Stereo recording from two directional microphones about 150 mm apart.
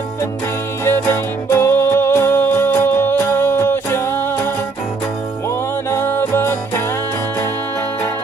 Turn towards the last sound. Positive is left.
turn(degrees=15)  # may be behind; listen again after turning